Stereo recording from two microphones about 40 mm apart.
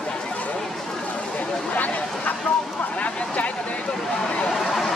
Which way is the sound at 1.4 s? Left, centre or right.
Left.